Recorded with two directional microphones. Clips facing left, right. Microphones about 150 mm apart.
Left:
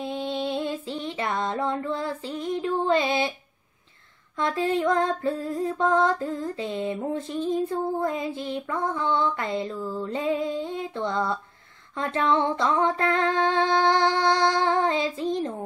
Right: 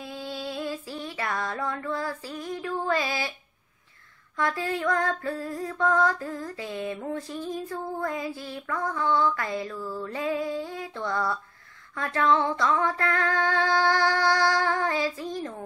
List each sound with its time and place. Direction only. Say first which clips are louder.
0.0 s female singing: left 6 dB; 25° left (ahead or behind)
4.4 s female singing: left 4 dB; 20° left (ahead or behind)